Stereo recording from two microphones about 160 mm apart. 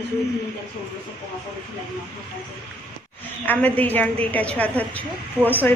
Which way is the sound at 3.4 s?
10° left (ahead or behind).